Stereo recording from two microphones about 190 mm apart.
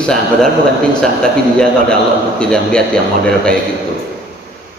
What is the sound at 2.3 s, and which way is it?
A man's voice, 5° left (ahead or behind).